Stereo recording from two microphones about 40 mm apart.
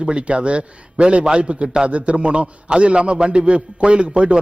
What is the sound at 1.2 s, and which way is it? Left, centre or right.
A man's voice, right.